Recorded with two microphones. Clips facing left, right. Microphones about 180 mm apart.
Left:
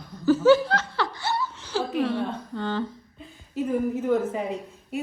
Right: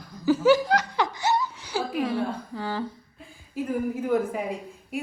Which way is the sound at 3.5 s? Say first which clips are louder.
Left 2 dB; 5° right (ahead or behind).